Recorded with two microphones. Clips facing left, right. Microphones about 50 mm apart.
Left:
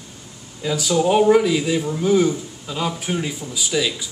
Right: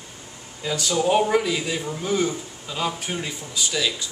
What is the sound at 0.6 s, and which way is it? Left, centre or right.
Speech, centre.